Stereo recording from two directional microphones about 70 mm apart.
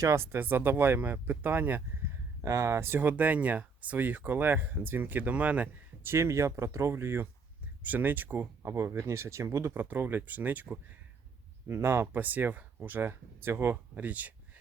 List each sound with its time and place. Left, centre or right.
0.0 s speech: right
2.4 s speech: right; by 6.1 s centre
6.1 s speech: right
8.6 s speech: right
9.9 s speech: right
11.7 s speech: right
12.2 s speech: right
13.9 s speech: right